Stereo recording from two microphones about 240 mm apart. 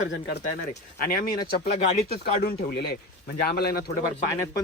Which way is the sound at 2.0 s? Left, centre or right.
Left.